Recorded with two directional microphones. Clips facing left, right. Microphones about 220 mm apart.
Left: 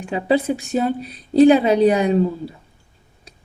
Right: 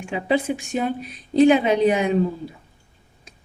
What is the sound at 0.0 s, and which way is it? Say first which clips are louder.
A woman's voice: left 3 dB; 35° left (ahead or behind).